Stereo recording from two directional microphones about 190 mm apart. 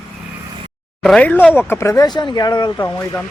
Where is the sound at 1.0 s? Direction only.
5° left (ahead or behind); by 3.2 s 20° left (ahead or behind).